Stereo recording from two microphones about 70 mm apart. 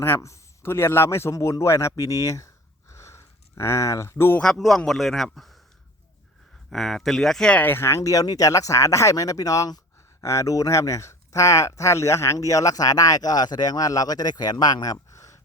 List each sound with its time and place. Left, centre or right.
0.2 s a man's voice: left
1.3 s speech: left
2.9 s a sound: left
4.5 s speech: centre
6.7 s speech: centre
7.5 s speech: left
10.2 s speech: left
14.9 s a sound: left